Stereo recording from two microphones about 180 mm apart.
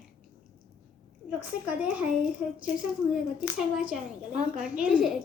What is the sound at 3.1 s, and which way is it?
A woman's voice, 5° right (ahead or behind).